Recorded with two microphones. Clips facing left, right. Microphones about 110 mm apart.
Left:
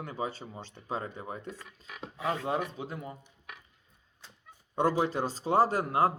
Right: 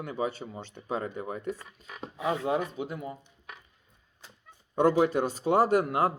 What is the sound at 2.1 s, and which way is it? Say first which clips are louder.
Speech: right 3 dB; 15° right (ahead or behind).